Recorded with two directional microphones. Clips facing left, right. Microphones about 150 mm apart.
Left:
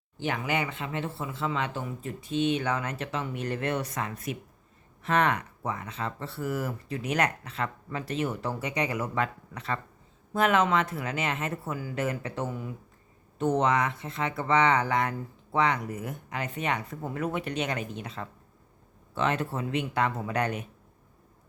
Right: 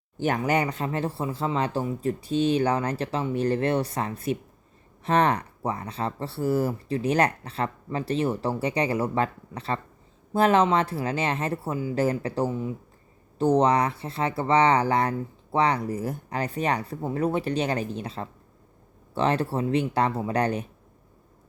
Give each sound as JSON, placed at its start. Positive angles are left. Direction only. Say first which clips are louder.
{"t": 0.2, "sound": "speech", "louder": "right 6 dB", "side_deg": -45}